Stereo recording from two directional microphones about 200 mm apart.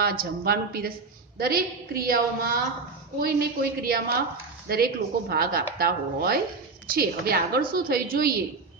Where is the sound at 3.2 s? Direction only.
50° right (ahead or behind).